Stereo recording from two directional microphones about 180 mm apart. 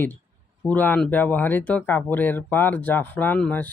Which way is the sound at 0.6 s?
10° left (ahead or behind).